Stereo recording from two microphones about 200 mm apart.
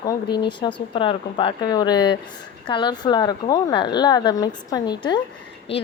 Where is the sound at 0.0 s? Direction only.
20° left (ahead or behind).